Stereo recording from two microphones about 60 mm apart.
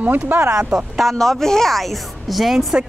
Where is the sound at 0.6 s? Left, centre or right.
Centre.